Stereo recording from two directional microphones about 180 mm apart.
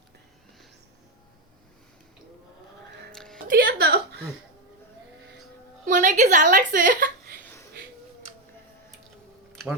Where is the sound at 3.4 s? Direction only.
55° right (ahead or behind).